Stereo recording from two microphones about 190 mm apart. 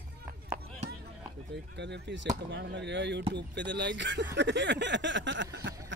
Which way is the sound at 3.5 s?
65° right (ahead or behind).